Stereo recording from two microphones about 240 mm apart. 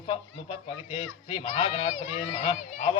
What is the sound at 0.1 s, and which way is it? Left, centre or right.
A man's voice, left.